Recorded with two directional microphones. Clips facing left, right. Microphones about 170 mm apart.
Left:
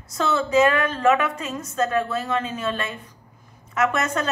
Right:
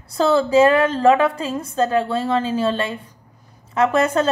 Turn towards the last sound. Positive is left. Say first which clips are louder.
# right 6 dB
turn(degrees=-30)  # may be behind; listen again after turning